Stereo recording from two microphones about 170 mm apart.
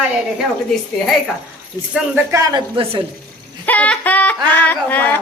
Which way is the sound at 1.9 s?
10° right (ahead or behind).